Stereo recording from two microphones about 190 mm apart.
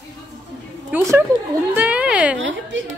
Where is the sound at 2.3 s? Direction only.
80° right.